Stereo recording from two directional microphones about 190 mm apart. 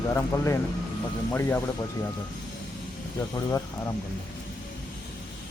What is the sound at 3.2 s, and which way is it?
Speech, 20° left (ahead or behind).